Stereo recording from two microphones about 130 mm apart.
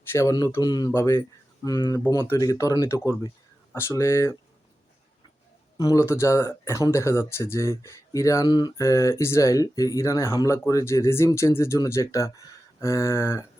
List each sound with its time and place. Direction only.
0.1 s speech: 20° left (ahead or behind)
5.7 s speech: 25° left (ahead or behind)